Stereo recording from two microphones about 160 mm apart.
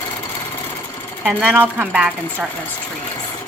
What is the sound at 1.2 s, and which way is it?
A woman's voice, 10° right (ahead or behind).